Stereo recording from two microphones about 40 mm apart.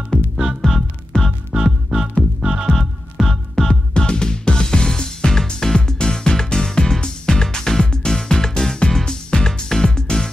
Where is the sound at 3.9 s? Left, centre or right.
Left.